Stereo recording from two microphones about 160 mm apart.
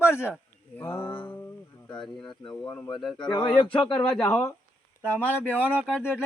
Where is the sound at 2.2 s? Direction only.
30° left (ahead or behind).